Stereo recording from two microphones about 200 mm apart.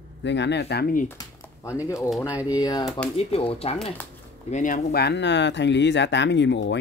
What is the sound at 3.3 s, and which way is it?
Speech, 30° left (ahead or behind).